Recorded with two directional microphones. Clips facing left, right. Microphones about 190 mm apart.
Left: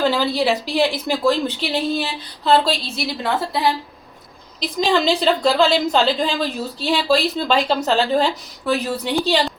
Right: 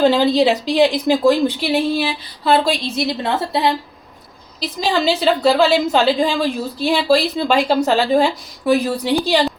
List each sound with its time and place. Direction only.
0.0 s a woman's voice: 20° right (ahead or behind)
4.6 s a woman's voice: 5° right (ahead or behind)